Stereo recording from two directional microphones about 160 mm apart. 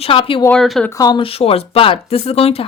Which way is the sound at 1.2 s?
35° left (ahead or behind).